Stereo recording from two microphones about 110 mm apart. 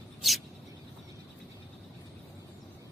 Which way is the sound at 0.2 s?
Centre (ahead or behind).